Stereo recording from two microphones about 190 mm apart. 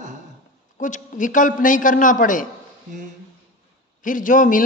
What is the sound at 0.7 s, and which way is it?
A man's voice, 40° left (ahead or behind).